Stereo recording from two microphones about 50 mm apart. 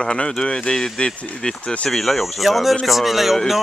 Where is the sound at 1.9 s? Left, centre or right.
Centre.